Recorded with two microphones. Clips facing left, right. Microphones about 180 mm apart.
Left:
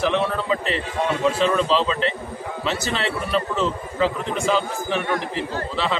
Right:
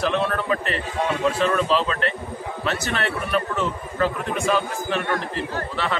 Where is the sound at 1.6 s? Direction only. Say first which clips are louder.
Left 1 dB; 10° right (ahead or behind).